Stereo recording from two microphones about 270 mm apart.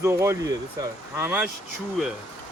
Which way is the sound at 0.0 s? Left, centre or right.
Centre.